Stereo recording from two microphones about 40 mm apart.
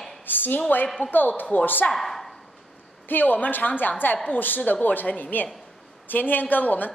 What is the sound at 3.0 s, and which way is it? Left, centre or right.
A woman's voice, left.